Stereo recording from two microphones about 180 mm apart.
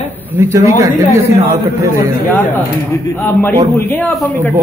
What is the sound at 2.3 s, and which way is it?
Speech, 10° left (ahead or behind).